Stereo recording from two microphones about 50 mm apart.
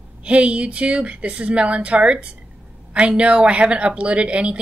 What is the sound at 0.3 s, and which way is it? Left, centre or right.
Speech, right.